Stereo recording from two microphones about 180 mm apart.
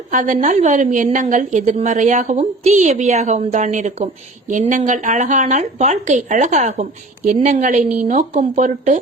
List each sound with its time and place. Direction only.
0.1 s a woman's voice: 45° right (ahead or behind)